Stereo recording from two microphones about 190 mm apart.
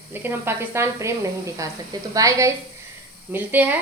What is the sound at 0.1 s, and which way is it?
A woman's voice, 10° right (ahead or behind).